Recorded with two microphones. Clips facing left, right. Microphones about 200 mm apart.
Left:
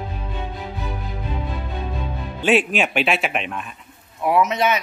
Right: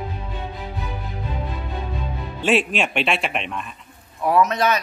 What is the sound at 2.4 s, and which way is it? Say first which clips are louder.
A man's voice: left 2 dB; centre (ahead or behind).